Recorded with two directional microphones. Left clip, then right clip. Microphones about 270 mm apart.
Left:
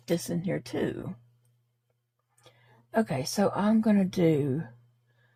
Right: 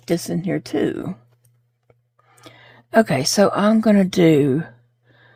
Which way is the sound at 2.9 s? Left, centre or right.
Right.